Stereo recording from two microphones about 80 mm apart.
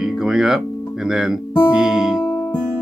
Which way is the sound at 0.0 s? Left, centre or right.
Centre.